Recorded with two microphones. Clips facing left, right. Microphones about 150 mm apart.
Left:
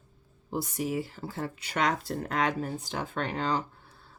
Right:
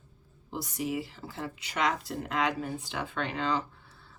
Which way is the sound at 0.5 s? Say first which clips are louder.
Left 2 dB; 45° left (ahead or behind).